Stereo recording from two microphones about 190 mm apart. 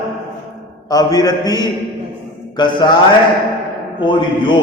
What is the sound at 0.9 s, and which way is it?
A man's voice, 20° left (ahead or behind).